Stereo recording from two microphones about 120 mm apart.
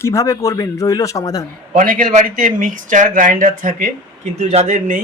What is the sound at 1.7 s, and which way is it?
Speech, 90° right.